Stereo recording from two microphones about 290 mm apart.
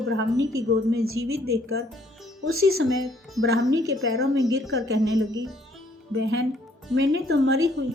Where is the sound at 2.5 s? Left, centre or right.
Right.